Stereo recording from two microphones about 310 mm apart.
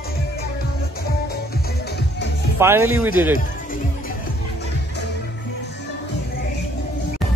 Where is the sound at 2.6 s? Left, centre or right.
Centre.